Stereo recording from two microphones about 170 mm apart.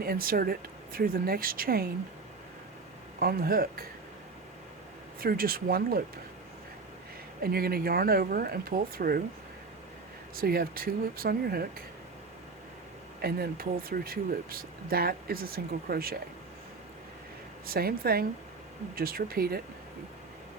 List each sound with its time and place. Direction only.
0.0 s speech: 60° right (ahead or behind)
3.2 s speech: 60° right (ahead or behind)
5.2 s speech: 60° right (ahead or behind)
7.4 s speech: 60° right (ahead or behind)
10.3 s speech: 60° right (ahead or behind)
13.2 s speech: 60° right (ahead or behind)
17.7 s speech: 60° right (ahead or behind)